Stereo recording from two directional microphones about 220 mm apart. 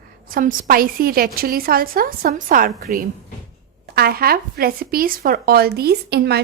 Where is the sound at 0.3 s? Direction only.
40° right (ahead or behind).